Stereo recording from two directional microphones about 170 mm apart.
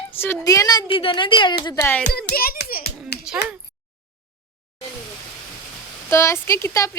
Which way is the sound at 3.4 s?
80° left.